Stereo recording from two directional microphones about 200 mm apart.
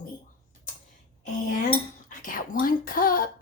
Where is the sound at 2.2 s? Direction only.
45° left (ahead or behind).